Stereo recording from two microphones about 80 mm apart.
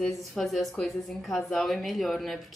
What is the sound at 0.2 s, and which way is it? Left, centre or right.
A woman's voice, centre.